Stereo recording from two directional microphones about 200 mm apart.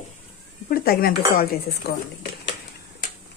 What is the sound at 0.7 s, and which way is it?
Speech, 50° left (ahead or behind).